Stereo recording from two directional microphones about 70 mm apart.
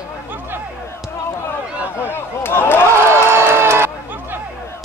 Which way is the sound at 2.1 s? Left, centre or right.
Left.